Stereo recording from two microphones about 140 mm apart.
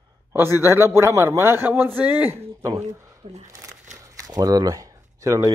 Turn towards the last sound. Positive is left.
turn(degrees=-25)  # may be behind; listen again after turning